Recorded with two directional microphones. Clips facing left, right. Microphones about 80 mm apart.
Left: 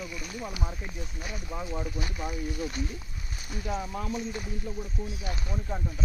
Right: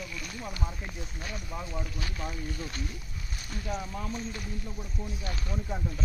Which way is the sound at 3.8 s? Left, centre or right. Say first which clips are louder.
Left 3 dB; centre.